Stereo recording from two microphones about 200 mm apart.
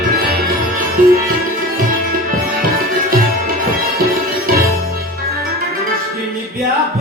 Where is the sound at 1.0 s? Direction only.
40° right (ahead or behind).